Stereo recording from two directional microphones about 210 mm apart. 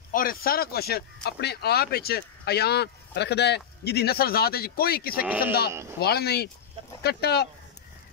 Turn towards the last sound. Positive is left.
turn(degrees=50)  # may be behind; listen again after turning